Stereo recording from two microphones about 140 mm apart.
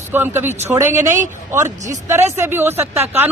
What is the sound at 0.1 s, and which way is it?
A man's voice, 15° right (ahead or behind).